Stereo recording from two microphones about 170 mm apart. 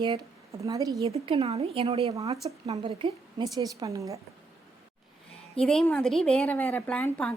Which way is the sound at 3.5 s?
20° right (ahead or behind).